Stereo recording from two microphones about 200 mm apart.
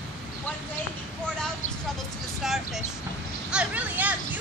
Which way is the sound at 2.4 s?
Centre (ahead or behind).